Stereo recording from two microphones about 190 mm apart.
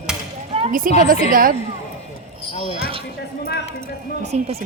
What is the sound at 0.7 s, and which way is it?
Speech, 50° right (ahead or behind).